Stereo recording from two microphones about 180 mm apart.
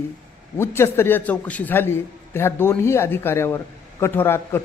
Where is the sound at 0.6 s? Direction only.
15° left (ahead or behind).